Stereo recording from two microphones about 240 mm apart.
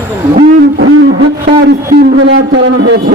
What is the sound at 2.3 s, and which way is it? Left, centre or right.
Speech, right.